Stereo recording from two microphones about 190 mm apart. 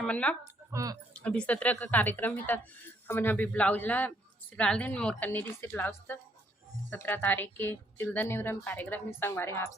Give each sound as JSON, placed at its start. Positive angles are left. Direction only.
{"t": 0.0, "sound": "speech", "side_deg": 5}
{"t": 0.7, "sound": "speech", "side_deg": -15}
{"t": 1.2, "sound": "a woman's voice", "side_deg": 5}